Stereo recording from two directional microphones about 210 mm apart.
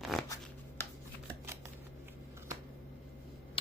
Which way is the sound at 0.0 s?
Centre (ahead or behind).